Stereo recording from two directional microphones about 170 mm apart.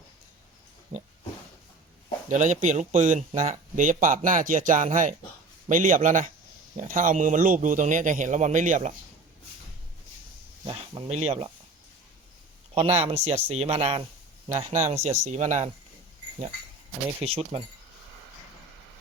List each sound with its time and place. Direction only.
2.3 s speech: 45° right (ahead or behind)
10.7 s speech: 35° right (ahead or behind)
12.7 s speech: 40° right (ahead or behind)
17.2 s speech: 35° right (ahead or behind)